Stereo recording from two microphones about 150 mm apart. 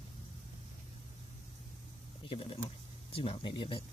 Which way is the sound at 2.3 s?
40° left (ahead or behind).